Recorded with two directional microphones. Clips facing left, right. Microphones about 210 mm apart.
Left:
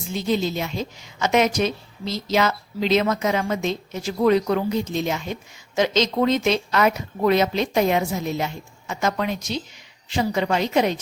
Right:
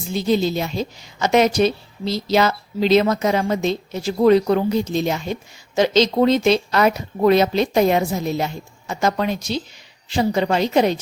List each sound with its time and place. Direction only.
0.1 s a woman's voice: 35° right (ahead or behind)